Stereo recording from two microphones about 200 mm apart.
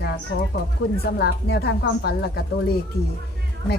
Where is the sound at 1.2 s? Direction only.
55° left (ahead or behind).